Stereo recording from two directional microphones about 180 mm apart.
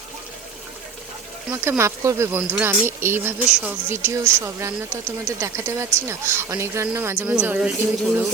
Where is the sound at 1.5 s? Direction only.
10° right (ahead or behind).